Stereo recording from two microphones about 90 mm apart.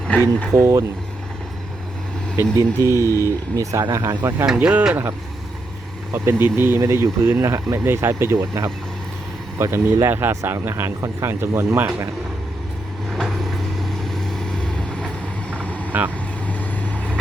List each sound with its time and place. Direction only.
0.1 s speech: 15° left (ahead or behind)
0.6 s speech: 40° right (ahead or behind)
2.3 s speech: 30° right (ahead or behind)
4.4 s speech: 10° right (ahead or behind)
6.1 s speech: 25° right (ahead or behind)
14.0 s vehicle: 5° left (ahead or behind)
15.9 s speech: 20° right (ahead or behind)
16.5 s vehicle: 15° left (ahead or behind)